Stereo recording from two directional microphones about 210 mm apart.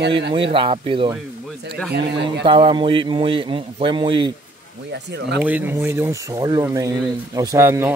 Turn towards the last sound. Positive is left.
turn(degrees=-10)  # may be behind; listen again after turning